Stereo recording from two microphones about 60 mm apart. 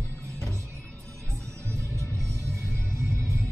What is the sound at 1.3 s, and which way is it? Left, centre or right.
Music, right.